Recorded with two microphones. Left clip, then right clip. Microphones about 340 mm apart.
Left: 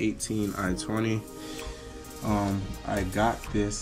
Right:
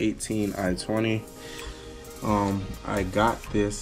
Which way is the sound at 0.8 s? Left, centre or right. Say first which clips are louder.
Right 3 dB; right.